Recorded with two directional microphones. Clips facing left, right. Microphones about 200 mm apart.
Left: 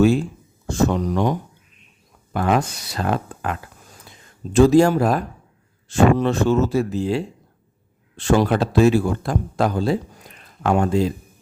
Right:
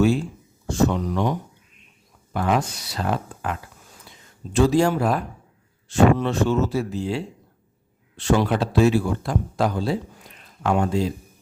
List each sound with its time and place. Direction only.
0.9 s speech: 45° left (ahead or behind)
4.5 s speech: 45° left (ahead or behind)